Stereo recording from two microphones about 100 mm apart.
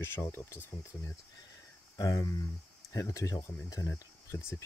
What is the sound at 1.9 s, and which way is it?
Speech, 35° left (ahead or behind).